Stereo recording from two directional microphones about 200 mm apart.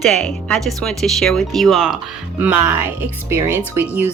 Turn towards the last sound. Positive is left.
turn(degrees=-10)  # may be behind; listen again after turning